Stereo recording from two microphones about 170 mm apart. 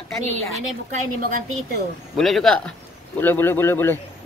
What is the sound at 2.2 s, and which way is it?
Speech, centre (ahead or behind).